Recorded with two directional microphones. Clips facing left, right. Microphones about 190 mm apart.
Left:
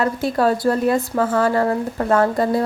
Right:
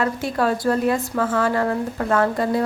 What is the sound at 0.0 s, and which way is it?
A woman's voice, 35° left (ahead or behind).